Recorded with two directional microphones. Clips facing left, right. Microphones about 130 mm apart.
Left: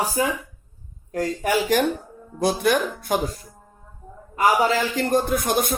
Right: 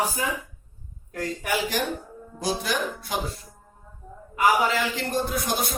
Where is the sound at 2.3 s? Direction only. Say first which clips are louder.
Left 7 dB; 55° left (ahead or behind).